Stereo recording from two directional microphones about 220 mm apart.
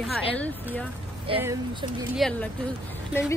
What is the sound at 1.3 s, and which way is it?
Speech, 25° right (ahead or behind).